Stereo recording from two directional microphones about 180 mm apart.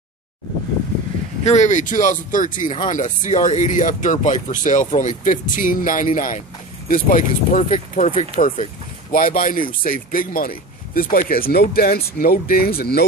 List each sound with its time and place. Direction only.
1.4 s speech: 40° left (ahead or behind); by 13.0 s 60° left (ahead or behind)